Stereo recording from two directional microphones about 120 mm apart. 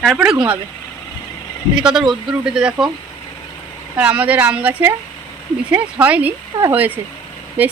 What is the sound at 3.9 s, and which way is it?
Speech, 10° right (ahead or behind).